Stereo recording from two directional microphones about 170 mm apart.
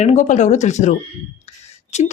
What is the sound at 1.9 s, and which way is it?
Speech, 40° left (ahead or behind).